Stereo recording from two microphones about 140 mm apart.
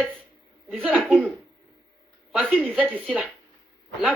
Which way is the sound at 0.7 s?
10° right (ahead or behind).